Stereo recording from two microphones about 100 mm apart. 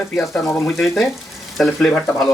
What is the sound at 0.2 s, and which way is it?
Speech, 15° left (ahead or behind).